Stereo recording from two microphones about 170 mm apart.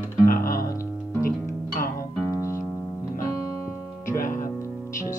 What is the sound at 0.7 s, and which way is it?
Music, 15° left (ahead or behind).